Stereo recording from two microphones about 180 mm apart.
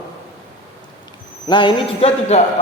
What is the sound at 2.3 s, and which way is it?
Speech, 35° left (ahead or behind).